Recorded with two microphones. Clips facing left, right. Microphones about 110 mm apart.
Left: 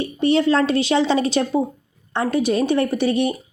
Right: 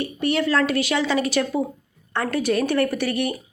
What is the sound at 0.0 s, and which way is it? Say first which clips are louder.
Speech: left 5 dB; 25° left (ahead or behind).